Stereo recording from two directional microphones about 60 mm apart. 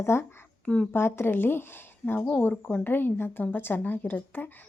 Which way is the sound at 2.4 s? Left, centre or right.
Left.